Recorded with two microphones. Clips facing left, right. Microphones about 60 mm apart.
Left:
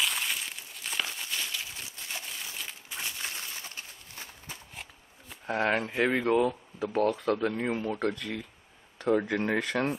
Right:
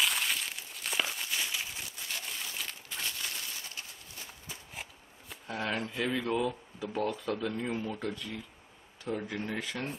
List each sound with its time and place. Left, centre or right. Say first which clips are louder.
0.0 s crumpling: even; centre
2.2 s crumpling: even; centre
2.9 s a sound: left 2 dB; centre
5.5 s speech: left 7 dB; left
7.0 s speech: left 6 dB; left
7.3 s speech: left 4 dB; left
8.0 s speech: left 6 dB; left